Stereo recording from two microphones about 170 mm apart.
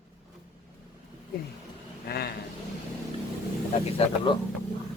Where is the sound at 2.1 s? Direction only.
70° left (ahead or behind).